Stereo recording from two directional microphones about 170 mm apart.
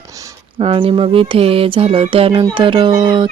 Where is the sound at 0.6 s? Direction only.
35° right (ahead or behind).